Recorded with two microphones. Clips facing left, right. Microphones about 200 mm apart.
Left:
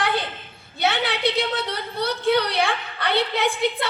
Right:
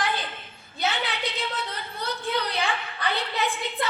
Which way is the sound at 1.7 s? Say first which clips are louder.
Left 7 dB; 75° left (ahead or behind).